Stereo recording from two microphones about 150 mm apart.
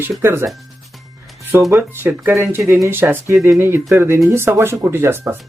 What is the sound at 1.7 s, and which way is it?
Speech, 15° right (ahead or behind).